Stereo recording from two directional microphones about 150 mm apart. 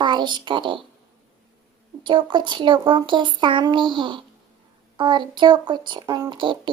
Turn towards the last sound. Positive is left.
turn(degrees=-35)  # may be behind; listen again after turning